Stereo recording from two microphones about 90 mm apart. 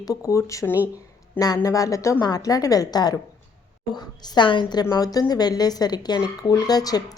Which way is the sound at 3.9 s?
60° left (ahead or behind).